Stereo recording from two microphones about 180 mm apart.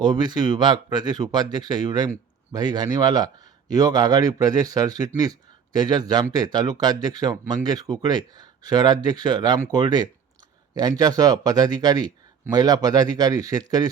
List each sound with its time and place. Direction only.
0.0 s speech: 25° right (ahead or behind)